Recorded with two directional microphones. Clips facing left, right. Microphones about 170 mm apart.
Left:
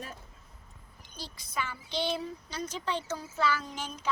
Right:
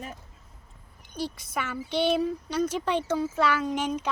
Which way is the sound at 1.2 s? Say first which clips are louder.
Right 6 dB; 65° right (ahead or behind).